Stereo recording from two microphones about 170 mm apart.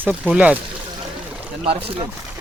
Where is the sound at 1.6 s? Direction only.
35° right (ahead or behind).